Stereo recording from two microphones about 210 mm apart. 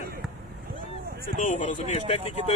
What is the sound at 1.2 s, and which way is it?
Speech, 40° left (ahead or behind).